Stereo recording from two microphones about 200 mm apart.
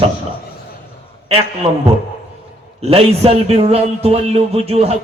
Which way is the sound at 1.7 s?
25° right (ahead or behind).